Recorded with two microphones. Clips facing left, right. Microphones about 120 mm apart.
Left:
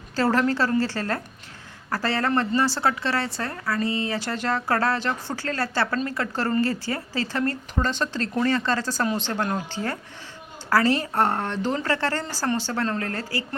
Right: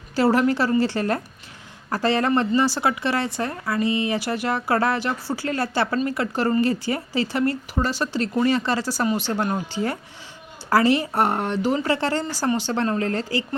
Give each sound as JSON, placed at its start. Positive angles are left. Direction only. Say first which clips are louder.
{"t": 0.2, "sound": "speech", "louder": "right 3 dB", "side_deg": -15}